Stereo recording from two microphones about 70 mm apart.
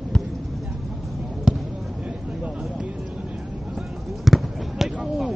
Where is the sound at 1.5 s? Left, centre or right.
Centre.